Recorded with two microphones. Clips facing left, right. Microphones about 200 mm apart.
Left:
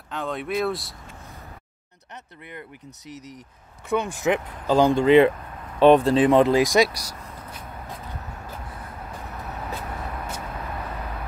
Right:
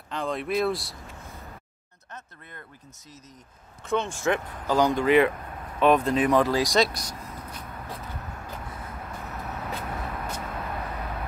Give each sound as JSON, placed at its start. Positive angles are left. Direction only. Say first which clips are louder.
{"t": 0.1, "sound": "speech", "louder": "even", "side_deg": 0}
{"t": 3.9, "sound": "speech", "louder": "left 3 dB", "side_deg": 15}